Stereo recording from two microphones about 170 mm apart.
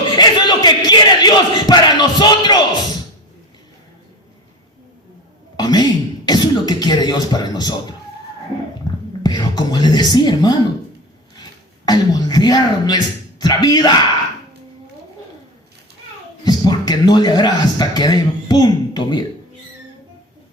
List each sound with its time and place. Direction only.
0.2 s a sound: 25° left (ahead or behind)
5.5 s throat clearing: 25° left (ahead or behind)
9.2 s a woman's voice: 25° left (ahead or behind)
11.9 s speech: 25° left (ahead or behind)
16.4 s a man's voice: 25° left (ahead or behind)